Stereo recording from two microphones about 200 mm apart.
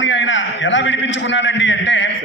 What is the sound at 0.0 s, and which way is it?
A man's voice, 70° left (ahead or behind).